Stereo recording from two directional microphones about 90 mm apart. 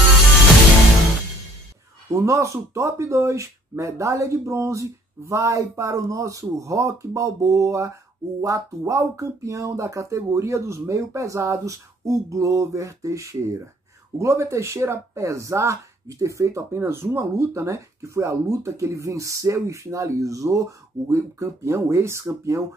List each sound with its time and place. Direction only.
2.1 s speech: 35° right (ahead or behind)